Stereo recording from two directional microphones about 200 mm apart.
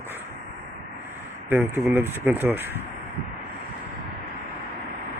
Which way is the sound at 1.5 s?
10° right (ahead or behind).